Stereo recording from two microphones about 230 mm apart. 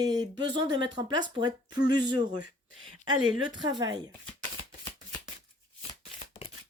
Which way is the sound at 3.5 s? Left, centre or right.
Centre.